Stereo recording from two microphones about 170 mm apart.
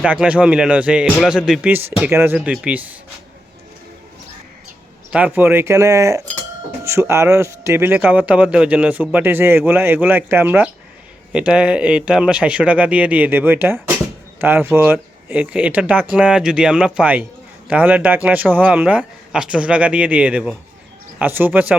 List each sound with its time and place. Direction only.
0.0 s speech: 5° right (ahead or behind)
5.1 s speech: 10° right (ahead or behind)